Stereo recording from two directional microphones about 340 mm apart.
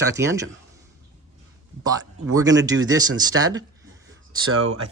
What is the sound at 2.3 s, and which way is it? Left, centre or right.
Speech, centre.